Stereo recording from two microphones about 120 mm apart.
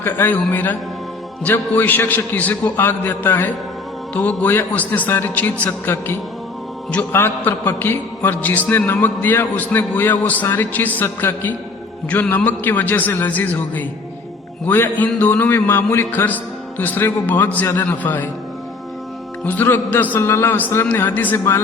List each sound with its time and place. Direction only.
0.0 s a man's voice: 15° left (ahead or behind)
19.5 s a man's voice: 15° left (ahead or behind)